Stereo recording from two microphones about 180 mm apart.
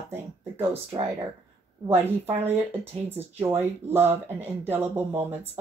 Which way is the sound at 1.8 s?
15° right (ahead or behind).